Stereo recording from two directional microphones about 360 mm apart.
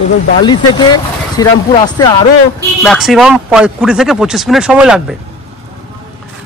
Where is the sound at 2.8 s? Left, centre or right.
Centre.